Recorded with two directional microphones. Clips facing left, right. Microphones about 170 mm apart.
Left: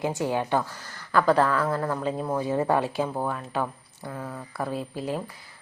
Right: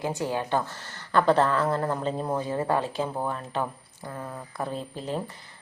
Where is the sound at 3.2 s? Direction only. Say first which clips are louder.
Left 1 dB; 5° left (ahead or behind).